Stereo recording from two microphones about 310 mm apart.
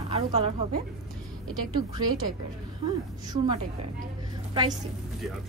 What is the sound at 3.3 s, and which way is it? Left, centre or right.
Speech, centre.